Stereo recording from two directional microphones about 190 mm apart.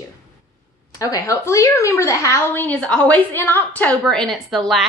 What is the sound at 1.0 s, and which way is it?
A woman's voice, 15° left (ahead or behind).